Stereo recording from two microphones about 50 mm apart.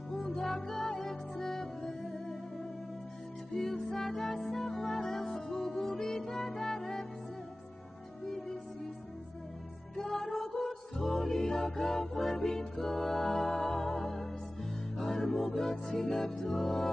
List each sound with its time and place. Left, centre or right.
0.4 s music: centre
3.5 s music: centre
9.9 s music: centre
11.3 s music: centre